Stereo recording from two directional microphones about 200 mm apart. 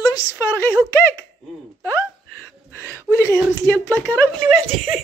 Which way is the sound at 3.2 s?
10° left (ahead or behind).